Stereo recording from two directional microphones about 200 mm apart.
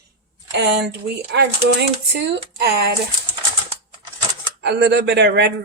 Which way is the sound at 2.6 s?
55° right (ahead or behind).